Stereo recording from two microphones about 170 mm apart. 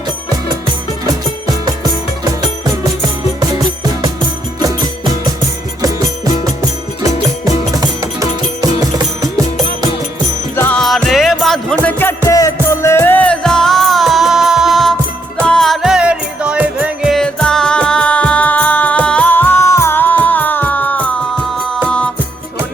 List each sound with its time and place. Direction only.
5.8 s music: 20° right (ahead or behind)
10.5 s music: 15° left (ahead or behind)
10.8 s music: centre (ahead or behind)